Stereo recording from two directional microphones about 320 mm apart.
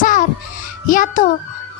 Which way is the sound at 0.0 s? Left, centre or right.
Left.